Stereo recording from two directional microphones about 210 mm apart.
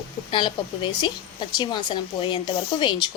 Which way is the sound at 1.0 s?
20° left (ahead or behind).